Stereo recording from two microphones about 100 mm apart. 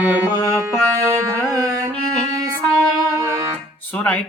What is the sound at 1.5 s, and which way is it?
Carnatic music, 35° right (ahead or behind).